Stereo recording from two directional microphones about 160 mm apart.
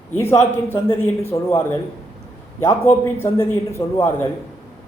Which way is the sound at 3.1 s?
15° left (ahead or behind).